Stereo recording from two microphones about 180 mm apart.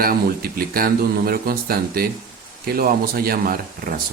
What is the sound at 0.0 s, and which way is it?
Speech, 55° right (ahead or behind).